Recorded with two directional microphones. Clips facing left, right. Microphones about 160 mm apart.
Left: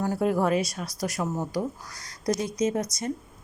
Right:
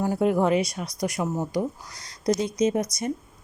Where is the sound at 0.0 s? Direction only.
15° right (ahead or behind).